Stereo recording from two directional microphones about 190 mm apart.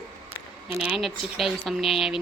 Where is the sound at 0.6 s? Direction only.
5° right (ahead or behind).